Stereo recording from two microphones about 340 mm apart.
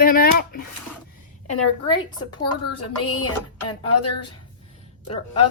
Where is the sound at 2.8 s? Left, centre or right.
Left.